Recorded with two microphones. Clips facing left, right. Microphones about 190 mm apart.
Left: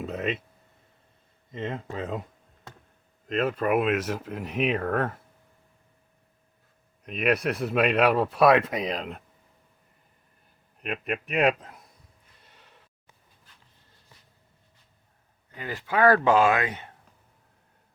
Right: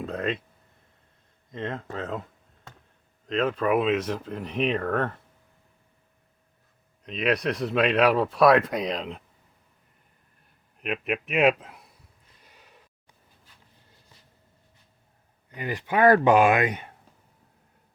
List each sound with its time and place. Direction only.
0.0 s speech: 5° left (ahead or behind)
1.5 s speech: 5° left (ahead or behind)
3.2 s speech: 5° left (ahead or behind)
7.0 s speech: 5° left (ahead or behind)
10.8 s a man's voice: centre (ahead or behind)
12.4 s gasp: 10° right (ahead or behind)
15.5 s speech: 15° right (ahead or behind)